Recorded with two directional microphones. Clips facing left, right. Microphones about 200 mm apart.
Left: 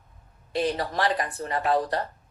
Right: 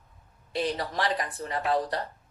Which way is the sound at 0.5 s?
50° left (ahead or behind).